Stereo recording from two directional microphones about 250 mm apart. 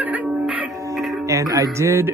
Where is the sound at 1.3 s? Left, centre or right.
Centre.